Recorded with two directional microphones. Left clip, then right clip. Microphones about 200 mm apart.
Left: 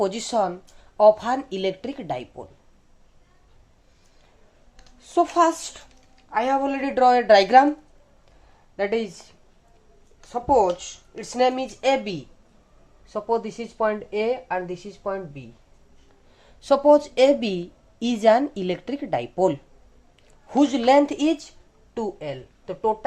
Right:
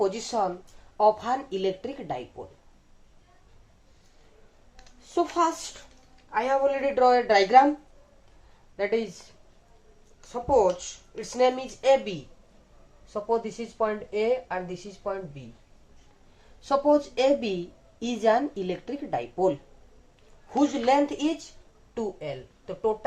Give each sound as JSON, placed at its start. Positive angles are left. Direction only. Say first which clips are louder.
{"t": 0.0, "sound": "a woman's voice", "louder": "left 3 dB", "side_deg": 55}
{"t": 4.9, "sound": "a woman's voice", "louder": "left 6 dB", "side_deg": 55}
{"t": 8.7, "sound": "a woman's voice", "louder": "left 3 dB", "side_deg": 50}
{"t": 10.5, "sound": "a woman's voice", "louder": "left 3 dB", "side_deg": 55}
{"t": 13.1, "sound": "a woman's voice", "louder": "left 3 dB", "side_deg": 40}
{"t": 16.6, "sound": "a woman's voice", "louder": "left 6 dB", "side_deg": 55}